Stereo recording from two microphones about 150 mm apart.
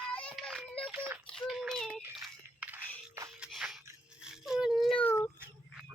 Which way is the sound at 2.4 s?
10° right (ahead or behind).